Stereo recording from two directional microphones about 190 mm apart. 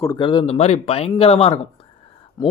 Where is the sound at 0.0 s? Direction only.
20° left (ahead or behind).